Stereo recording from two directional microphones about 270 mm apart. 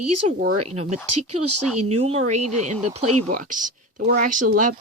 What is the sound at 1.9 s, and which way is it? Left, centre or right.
Speech, right.